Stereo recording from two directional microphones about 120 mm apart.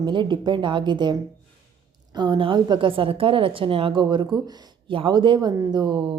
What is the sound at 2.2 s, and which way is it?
A woman's voice, 40° right (ahead or behind).